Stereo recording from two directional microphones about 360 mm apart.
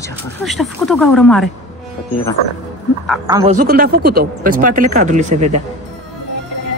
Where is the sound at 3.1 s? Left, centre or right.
Centre.